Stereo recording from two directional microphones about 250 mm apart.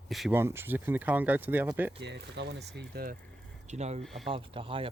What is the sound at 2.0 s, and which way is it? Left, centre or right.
Speech, right.